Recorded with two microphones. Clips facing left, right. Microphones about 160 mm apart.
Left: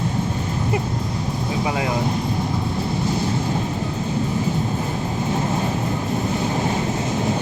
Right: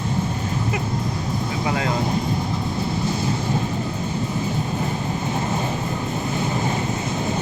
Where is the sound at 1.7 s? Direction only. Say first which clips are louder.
Right 1 dB; 15° left (ahead or behind).